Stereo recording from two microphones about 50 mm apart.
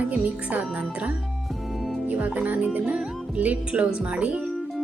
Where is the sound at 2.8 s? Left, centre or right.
Centre.